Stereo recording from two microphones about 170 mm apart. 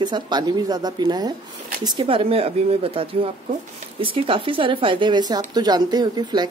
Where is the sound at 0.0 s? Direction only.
25° right (ahead or behind).